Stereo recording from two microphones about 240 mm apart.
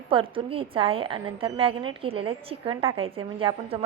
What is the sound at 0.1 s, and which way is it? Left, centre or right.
A woman's voice, right.